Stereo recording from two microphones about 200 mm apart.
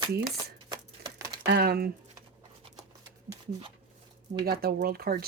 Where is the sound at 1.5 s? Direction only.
50° right (ahead or behind).